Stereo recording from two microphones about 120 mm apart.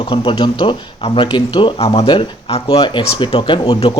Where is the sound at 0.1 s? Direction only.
45° left (ahead or behind).